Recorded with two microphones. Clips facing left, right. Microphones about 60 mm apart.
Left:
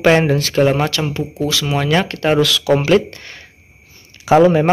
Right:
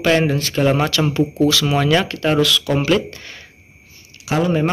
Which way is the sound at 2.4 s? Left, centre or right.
Left.